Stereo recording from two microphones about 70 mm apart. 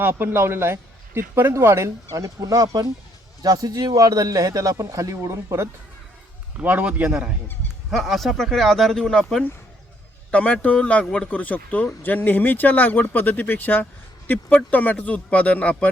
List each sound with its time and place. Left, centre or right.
0.0 s a man's voice: right
6.6 s a man's voice: right
7.9 s speech: centre
10.3 s a man's voice: centre